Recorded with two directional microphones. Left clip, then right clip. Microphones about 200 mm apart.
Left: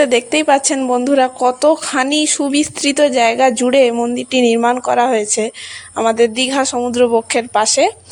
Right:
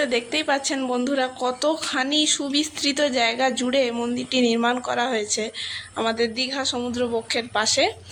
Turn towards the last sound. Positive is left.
turn(degrees=35)  # may be behind; listen again after turning